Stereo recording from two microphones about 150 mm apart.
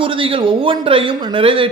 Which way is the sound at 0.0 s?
35° right (ahead or behind).